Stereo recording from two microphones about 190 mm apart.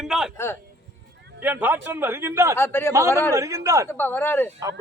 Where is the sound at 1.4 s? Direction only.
10° right (ahead or behind).